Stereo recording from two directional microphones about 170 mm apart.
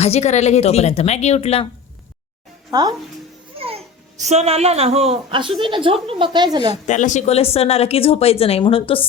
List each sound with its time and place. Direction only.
0.0 s speech: 40° left (ahead or behind)
3.6 s a child's voice: 35° right (ahead or behind)
6.8 s speech: 45° left (ahead or behind)